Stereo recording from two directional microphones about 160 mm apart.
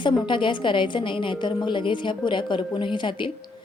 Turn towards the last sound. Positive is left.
turn(degrees=30)  # may be behind; listen again after turning